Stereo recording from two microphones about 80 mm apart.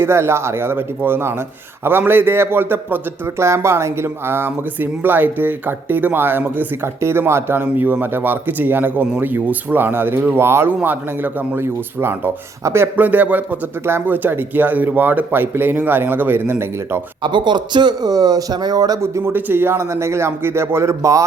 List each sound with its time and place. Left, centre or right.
0.0 s speech: right
13.1 s speech: centre
17.2 s a man's voice: right
19.0 s speech: right